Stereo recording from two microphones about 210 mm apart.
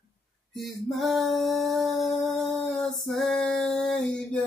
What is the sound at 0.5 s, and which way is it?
Music, centre (ahead or behind).